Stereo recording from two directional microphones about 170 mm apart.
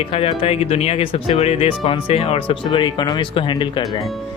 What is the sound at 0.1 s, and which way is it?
Speech, 35° left (ahead or behind).